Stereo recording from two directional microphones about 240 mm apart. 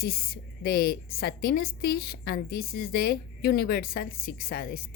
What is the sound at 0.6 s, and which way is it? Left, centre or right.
A woman's voice, left.